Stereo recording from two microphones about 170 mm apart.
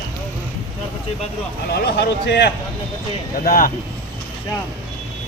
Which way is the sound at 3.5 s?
55° left (ahead or behind).